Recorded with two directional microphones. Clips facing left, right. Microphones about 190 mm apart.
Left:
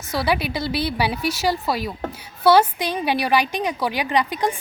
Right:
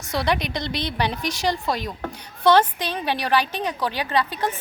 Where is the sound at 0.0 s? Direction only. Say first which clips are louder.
Left 1 dB; centre (ahead or behind).